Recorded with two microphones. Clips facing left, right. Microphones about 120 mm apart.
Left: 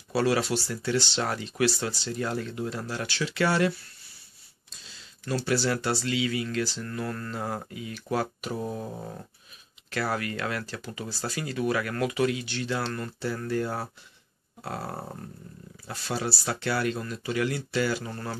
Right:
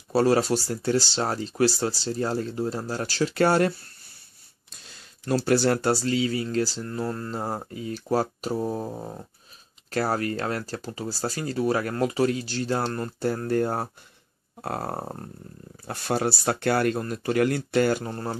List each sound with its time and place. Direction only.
0.1 s speech: 40° right (ahead or behind)
4.6 s a sound: 55° right (ahead or behind)
5.2 s speech: 40° right (ahead or behind)
6.9 s speech: 25° right (ahead or behind)
8.9 s a sound: 20° right (ahead or behind)
9.8 s speech: 40° right (ahead or behind)
18.1 s speech: 35° right (ahead or behind)